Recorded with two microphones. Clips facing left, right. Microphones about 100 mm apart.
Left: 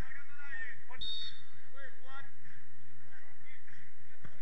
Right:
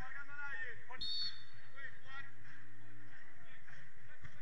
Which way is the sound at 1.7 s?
25° left (ahead or behind).